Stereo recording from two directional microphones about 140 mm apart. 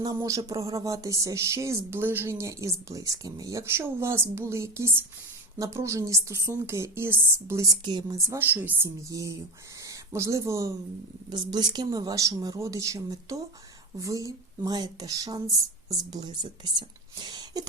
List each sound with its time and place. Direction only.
0.0 s speech: 25° right (ahead or behind)